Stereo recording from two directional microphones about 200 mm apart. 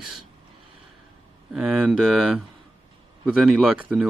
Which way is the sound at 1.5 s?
5° right (ahead or behind).